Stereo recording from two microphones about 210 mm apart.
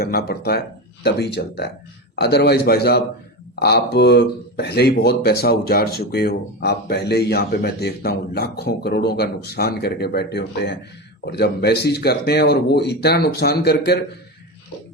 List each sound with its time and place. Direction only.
0.0 s speech: 45° left (ahead or behind)